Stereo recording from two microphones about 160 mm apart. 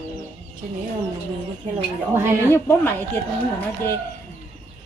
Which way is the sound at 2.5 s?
15° left (ahead or behind).